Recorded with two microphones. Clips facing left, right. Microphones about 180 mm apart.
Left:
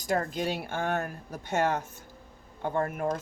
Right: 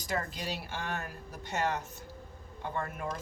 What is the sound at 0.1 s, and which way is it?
Speech, 50° left (ahead or behind).